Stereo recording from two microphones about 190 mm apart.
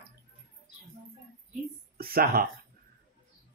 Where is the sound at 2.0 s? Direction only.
50° right (ahead or behind).